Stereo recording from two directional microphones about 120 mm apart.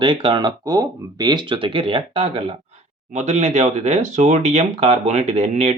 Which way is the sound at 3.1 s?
75° right (ahead or behind).